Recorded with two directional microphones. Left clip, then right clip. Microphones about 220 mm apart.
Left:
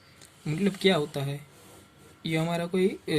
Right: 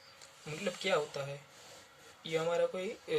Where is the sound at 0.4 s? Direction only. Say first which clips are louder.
Left 10 dB; 40° left (ahead or behind).